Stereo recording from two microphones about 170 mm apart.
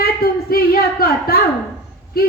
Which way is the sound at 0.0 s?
65° left (ahead or behind).